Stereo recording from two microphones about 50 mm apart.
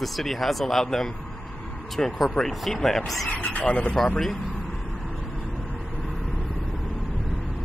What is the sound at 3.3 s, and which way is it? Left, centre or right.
Speech, left.